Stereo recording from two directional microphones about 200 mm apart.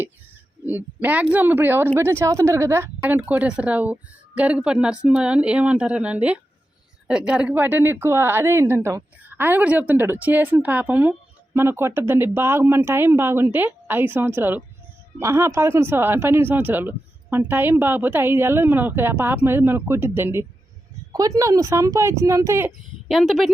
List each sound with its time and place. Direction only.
1.0 s speech: 5° right (ahead or behind)
23.0 s speech: centre (ahead or behind)